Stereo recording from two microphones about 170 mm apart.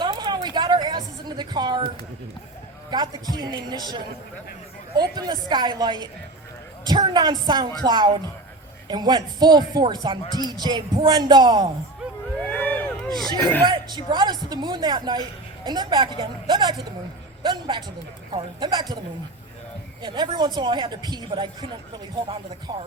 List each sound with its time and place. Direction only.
0.0 s a sound: 25° right (ahead or behind)
2.9 s speech: 25° right (ahead or behind)
10.2 s speech: 20° left (ahead or behind)
10.5 s speech: 25° right (ahead or behind)
12.5 s a sound: 5° left (ahead or behind)
13.4 s speech: 10° left (ahead or behind)
13.7 s speech: 25° right (ahead or behind)
20.0 s speech: 25° right (ahead or behind)